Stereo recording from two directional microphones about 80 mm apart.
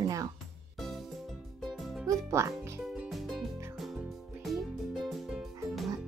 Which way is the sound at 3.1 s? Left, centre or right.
Centre.